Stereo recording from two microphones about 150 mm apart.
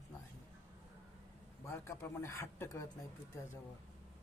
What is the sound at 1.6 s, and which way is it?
Speech, 20° left (ahead or behind).